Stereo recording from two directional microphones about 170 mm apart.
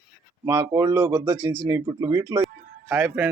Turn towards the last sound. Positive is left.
turn(degrees=-10)  # may be behind; listen again after turning